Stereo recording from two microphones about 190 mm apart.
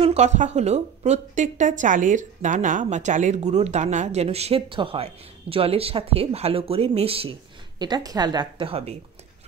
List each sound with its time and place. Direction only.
0.0 s a woman's voice: 35° right (ahead or behind)